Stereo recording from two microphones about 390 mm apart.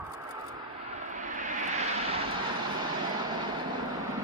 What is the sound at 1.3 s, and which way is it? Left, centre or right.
Vehicle, centre.